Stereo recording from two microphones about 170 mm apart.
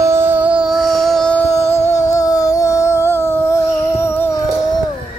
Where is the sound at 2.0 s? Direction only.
20° left (ahead or behind).